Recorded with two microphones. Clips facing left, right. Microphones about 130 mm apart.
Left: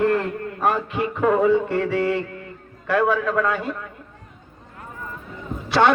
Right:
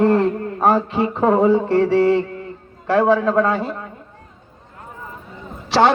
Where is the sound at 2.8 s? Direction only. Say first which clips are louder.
Right 5 dB; 30° right (ahead or behind).